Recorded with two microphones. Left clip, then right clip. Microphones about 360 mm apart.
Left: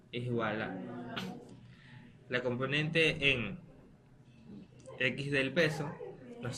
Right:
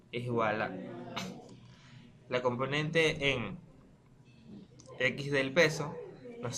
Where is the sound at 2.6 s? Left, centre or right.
Centre.